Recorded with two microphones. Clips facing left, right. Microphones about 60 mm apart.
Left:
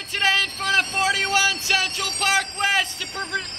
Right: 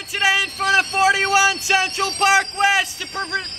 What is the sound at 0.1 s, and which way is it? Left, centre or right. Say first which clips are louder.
Speech: right 3 dB; centre.